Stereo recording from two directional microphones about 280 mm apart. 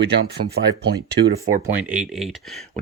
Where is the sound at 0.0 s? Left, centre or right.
Right.